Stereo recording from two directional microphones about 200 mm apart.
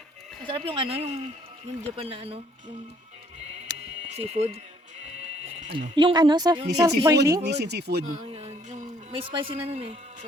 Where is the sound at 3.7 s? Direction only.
20° right (ahead or behind).